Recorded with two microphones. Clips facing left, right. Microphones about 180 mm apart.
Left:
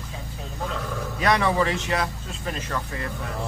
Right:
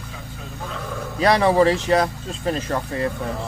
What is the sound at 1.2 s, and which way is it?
Speech, 35° right (ahead or behind).